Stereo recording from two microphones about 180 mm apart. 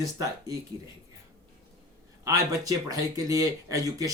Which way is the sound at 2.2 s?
20° right (ahead or behind).